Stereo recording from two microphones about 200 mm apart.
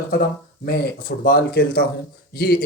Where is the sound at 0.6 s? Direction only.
50° left (ahead or behind).